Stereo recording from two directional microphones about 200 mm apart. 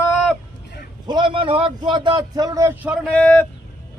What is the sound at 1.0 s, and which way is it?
A man's voice, 25° right (ahead or behind).